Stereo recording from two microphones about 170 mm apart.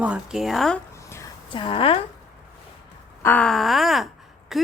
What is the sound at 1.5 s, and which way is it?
Speech, 30° left (ahead or behind).